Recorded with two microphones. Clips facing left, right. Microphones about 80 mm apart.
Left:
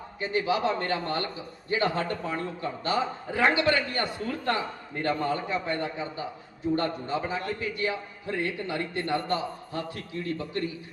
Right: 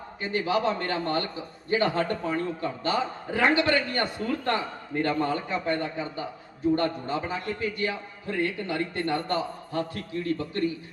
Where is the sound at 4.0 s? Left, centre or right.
Right.